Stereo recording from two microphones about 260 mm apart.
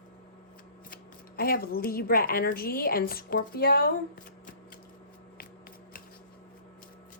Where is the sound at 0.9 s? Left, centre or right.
Left.